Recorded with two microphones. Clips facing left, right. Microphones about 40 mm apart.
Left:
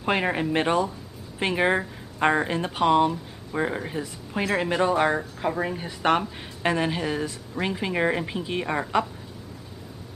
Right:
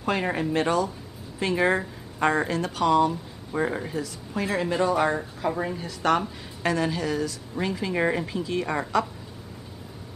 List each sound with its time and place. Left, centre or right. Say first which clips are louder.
0.0 s a woman's voice: left 2 dB; left